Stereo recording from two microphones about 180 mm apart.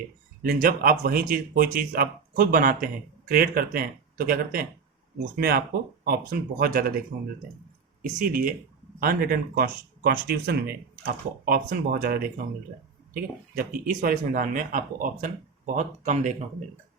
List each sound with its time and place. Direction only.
0.4 s speech: 50° right (ahead or behind)
8.2 s speech: 50° right (ahead or behind)